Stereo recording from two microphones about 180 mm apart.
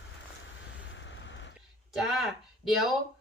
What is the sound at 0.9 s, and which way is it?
Vehicle, 90° left.